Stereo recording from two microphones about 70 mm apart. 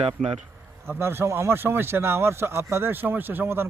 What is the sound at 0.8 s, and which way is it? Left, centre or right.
Speech, right.